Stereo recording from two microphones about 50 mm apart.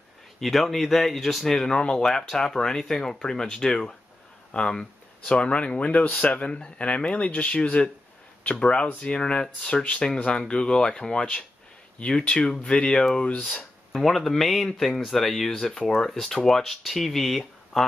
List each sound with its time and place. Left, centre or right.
0.4 s speech: centre
13.9 s speech: centre